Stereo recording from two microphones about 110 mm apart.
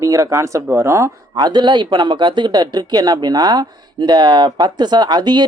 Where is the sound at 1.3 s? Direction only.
40° right (ahead or behind).